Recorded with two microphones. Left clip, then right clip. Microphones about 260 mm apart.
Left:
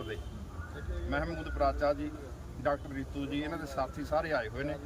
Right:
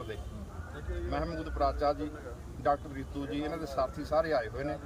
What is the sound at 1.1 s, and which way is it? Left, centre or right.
Speech, centre.